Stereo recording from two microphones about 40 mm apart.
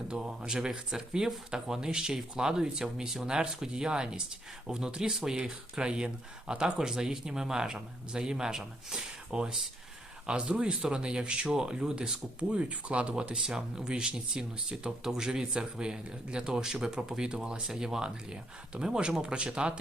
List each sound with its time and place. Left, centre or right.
0.1 s speech: centre
10.2 s speech: right
12.4 s speech: right; by 15.4 s centre
15.5 s speech: right